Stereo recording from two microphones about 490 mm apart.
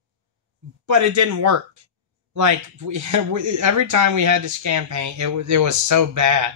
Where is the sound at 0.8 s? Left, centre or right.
Right.